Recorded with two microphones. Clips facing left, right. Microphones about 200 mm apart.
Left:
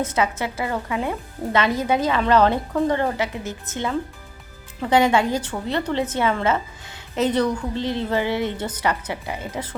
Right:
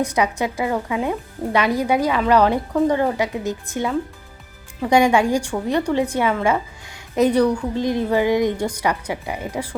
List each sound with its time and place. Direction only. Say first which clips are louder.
0.0 s a woman's voice: right 3 dB; 15° right (ahead or behind)
4.8 s a woman's voice: right 2 dB; 15° right (ahead or behind)